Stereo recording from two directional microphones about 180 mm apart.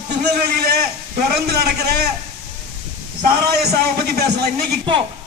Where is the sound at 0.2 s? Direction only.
60° right (ahead or behind).